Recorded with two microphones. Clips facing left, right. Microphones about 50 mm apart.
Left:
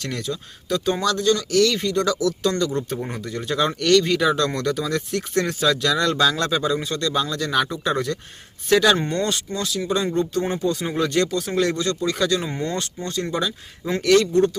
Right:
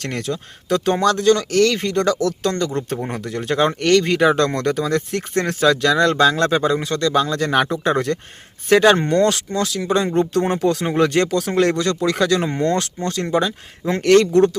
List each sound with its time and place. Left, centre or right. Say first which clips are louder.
0.0 s speech: right 3 dB; right
3.8 s speech: even; right
10.6 s speech: right 5 dB; right
10.8 s speech: right 4 dB; right
13.3 s speech: right 6 dB; right